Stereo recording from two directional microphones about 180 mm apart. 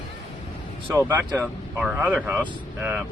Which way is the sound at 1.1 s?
10° right (ahead or behind).